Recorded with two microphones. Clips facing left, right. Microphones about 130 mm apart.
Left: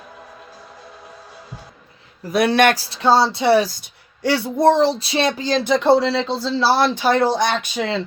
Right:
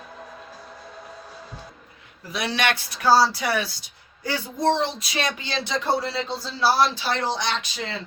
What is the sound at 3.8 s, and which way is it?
Speech, 75° left (ahead or behind).